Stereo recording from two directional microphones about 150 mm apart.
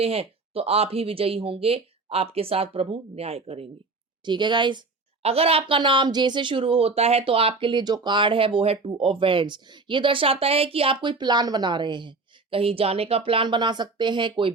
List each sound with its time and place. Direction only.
0.0 s speech: 40° right (ahead or behind)
4.3 s speech: 30° right (ahead or behind)
5.2 s speech: 40° right (ahead or behind)